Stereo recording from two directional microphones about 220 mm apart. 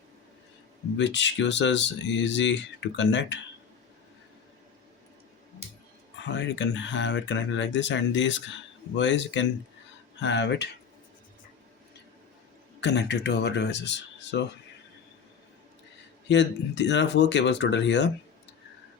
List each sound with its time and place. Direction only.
0.9 s speech: 55° left (ahead or behind)
6.2 s speech: 55° left (ahead or behind)
12.8 s speech: 50° left (ahead or behind)
16.3 s speech: 50° left (ahead or behind)